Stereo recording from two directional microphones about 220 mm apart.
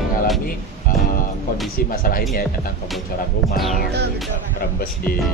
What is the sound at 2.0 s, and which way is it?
Speech, 40° left (ahead or behind).